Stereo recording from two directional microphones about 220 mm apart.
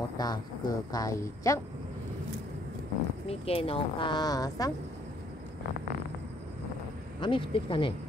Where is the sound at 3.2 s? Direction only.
25° left (ahead or behind).